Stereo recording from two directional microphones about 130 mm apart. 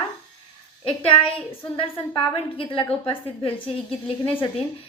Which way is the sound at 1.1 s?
45° left (ahead or behind).